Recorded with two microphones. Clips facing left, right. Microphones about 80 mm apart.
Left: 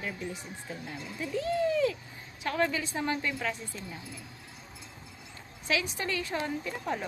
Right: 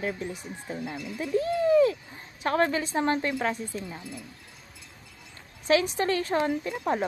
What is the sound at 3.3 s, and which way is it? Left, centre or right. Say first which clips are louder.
Speech: right 5 dB; right.